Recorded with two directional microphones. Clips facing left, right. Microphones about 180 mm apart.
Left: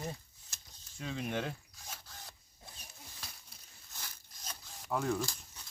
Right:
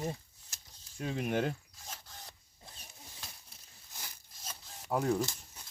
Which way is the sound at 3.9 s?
15° right (ahead or behind).